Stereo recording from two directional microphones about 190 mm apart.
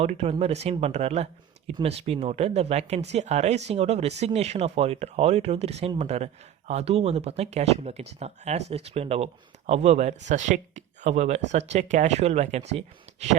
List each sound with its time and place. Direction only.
0.0 s speech: 35° right (ahead or behind)